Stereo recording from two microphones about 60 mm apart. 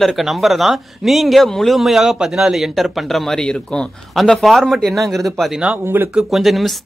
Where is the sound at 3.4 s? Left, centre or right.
Centre.